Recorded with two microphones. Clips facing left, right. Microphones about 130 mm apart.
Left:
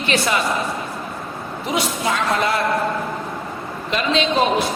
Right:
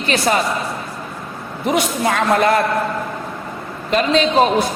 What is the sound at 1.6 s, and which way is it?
Speech, 55° right (ahead or behind).